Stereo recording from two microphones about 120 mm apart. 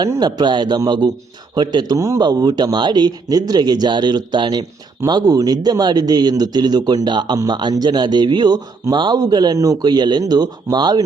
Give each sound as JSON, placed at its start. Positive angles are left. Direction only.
{"t": 0.0, "sound": "speech", "side_deg": -35}